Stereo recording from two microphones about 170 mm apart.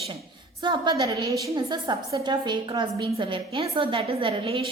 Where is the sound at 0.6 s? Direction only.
25° right (ahead or behind).